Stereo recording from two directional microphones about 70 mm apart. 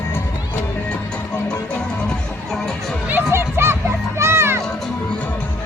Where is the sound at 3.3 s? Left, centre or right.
Right.